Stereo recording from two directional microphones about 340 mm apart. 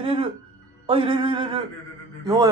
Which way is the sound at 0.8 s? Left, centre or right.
Centre.